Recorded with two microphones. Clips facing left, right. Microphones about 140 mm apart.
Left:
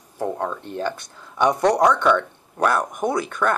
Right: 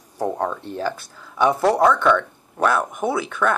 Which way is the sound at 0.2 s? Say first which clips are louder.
Right 2 dB; 15° right (ahead or behind).